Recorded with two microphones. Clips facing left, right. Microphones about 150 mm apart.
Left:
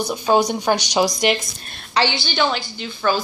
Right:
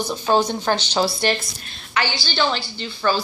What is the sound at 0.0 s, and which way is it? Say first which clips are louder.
Speech: left 2 dB; 10° left (ahead or behind).